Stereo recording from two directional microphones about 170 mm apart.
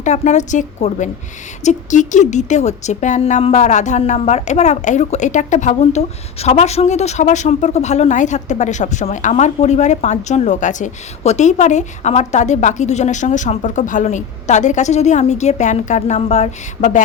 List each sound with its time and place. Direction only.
0.0 s a woman's voice: 45° left (ahead or behind)